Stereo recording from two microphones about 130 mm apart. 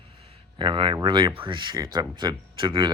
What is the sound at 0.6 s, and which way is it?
Speech, 40° right (ahead or behind).